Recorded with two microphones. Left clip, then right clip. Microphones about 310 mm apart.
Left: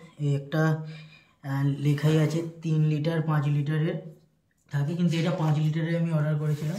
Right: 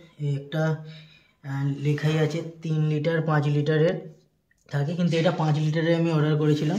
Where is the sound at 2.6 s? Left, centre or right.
Centre.